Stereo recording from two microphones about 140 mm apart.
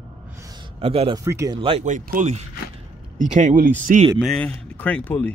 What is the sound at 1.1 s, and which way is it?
Speech, 20° right (ahead or behind).